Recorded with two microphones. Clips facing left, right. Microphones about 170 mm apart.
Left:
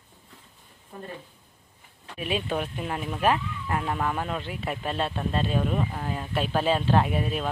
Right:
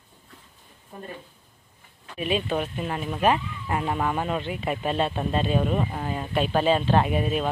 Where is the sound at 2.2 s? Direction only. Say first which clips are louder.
Right 3 dB; 5° left (ahead or behind).